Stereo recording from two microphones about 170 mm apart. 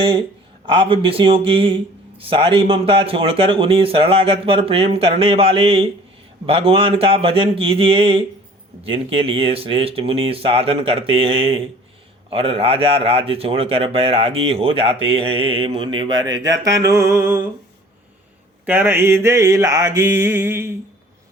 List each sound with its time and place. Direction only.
0.0 s speech: 30° right (ahead or behind); by 17.4 s 15° right (ahead or behind)
18.6 s mantra: 10° right (ahead or behind)